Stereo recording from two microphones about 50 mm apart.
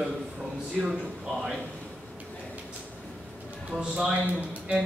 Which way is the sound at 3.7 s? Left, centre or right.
Right.